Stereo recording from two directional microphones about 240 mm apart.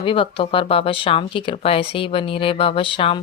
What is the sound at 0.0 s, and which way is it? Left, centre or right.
Speech, left.